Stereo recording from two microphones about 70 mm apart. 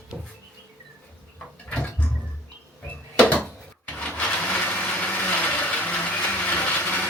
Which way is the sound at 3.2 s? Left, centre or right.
Centre.